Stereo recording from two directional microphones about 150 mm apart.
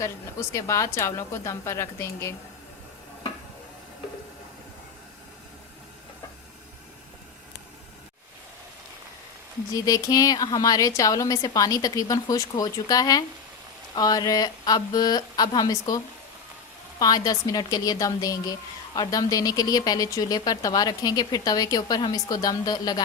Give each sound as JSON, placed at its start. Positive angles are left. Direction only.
{"t": 0.0, "sound": "a woman's voice", "side_deg": 20}
{"t": 9.7, "sound": "a woman's voice", "side_deg": 25}
{"t": 17.0, "sound": "a woman's voice", "side_deg": 25}